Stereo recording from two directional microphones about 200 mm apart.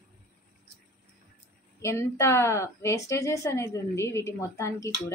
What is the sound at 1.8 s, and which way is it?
A woman's voice, 15° left (ahead or behind).